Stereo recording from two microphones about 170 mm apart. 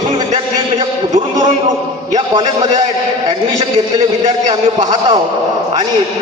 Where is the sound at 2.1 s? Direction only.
25° right (ahead or behind).